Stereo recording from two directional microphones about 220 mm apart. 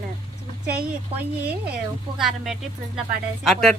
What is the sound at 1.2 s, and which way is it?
A child's voice, 5° right (ahead or behind).